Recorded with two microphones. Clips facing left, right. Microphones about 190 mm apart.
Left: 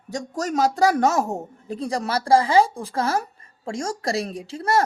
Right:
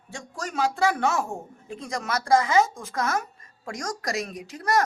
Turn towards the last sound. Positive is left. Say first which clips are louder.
# left 3 dB
turn(degrees=30)  # may be behind; listen again after turning